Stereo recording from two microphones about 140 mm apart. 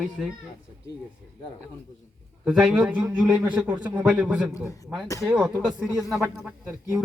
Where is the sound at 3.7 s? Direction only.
30° right (ahead or behind).